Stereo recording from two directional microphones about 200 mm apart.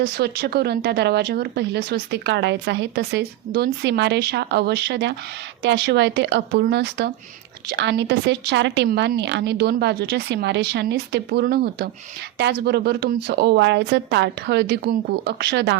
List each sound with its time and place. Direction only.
0.0 s speech: 55° right (ahead or behind)